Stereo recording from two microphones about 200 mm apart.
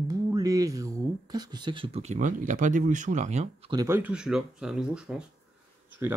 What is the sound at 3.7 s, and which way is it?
Speech, 15° right (ahead or behind).